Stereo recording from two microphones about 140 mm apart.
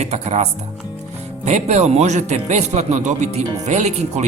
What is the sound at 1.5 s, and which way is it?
Speech, 50° right (ahead or behind).